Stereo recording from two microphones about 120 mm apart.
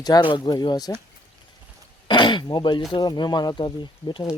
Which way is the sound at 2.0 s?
40° left (ahead or behind).